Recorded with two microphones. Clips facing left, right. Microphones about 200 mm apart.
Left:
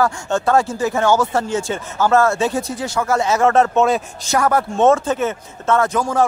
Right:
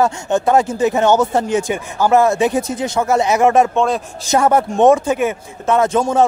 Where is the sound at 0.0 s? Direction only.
20° right (ahead or behind).